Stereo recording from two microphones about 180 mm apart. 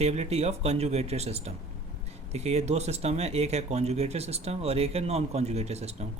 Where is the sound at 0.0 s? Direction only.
35° right (ahead or behind).